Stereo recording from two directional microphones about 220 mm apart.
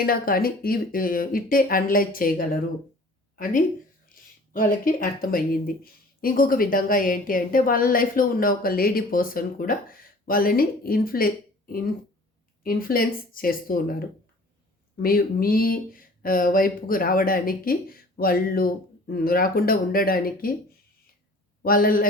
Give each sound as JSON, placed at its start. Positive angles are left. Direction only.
{"t": 0.0, "sound": "speech", "side_deg": 40}
{"t": 14.9, "sound": "speech", "side_deg": 40}
{"t": 21.6, "sound": "a man's voice", "side_deg": 40}